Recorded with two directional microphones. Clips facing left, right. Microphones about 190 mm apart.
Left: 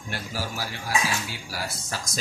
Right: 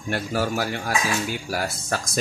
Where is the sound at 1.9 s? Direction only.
55° right (ahead or behind).